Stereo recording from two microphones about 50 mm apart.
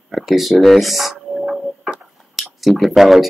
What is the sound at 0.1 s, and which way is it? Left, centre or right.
Speech, centre.